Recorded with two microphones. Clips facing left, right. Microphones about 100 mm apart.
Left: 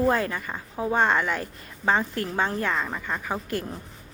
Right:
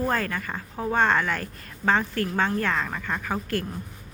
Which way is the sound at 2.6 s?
5° left (ahead or behind).